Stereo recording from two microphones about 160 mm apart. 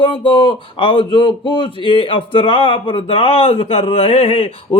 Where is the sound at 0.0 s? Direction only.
30° left (ahead or behind).